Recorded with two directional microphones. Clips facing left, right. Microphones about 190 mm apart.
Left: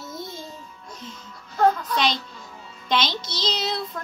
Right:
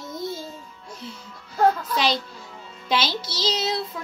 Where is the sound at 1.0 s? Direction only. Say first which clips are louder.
Right 2 dB; 10° right (ahead or behind).